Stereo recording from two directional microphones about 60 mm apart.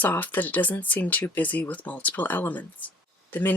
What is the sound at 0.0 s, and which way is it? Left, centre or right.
Speech, left.